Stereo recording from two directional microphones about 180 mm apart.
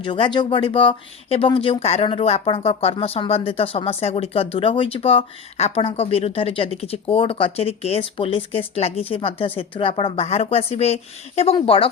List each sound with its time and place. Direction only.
0.0 s speech: 30° left (ahead or behind)